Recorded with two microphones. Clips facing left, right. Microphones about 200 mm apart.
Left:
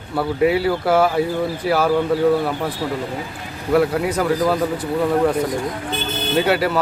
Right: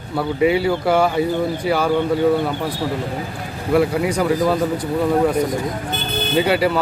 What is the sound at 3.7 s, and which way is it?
Speech, centre (ahead or behind).